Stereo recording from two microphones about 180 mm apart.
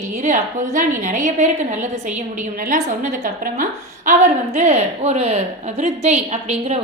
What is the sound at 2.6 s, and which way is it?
A woman's voice, 50° right (ahead or behind).